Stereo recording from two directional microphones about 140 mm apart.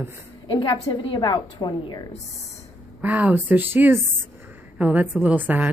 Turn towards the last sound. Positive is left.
turn(degrees=-10)  # may be behind; listen again after turning